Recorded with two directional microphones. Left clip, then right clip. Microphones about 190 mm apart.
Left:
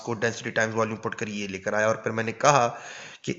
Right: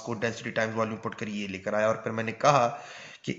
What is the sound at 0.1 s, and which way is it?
Speech, 25° left (ahead or behind).